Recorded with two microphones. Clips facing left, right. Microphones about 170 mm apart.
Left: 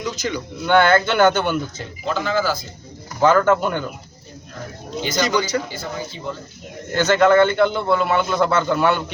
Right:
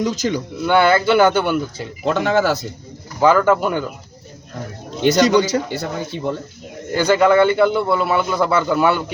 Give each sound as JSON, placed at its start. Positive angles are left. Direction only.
{"t": 0.0, "sound": "speech", "side_deg": -45}
{"t": 0.6, "sound": "a man's voice", "side_deg": -5}
{"t": 2.0, "sound": "speech", "side_deg": -65}
{"t": 3.2, "sound": "a man's voice", "side_deg": -10}
{"t": 4.9, "sound": "a man's voice", "side_deg": -65}
{"t": 6.9, "sound": "a man's voice", "side_deg": -10}